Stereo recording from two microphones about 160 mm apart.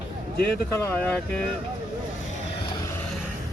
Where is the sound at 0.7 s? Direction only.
15° left (ahead or behind).